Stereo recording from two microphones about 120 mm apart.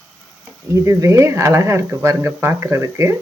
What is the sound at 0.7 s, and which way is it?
Speech, 25° right (ahead or behind).